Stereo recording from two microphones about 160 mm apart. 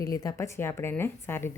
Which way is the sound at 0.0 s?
20° left (ahead or behind).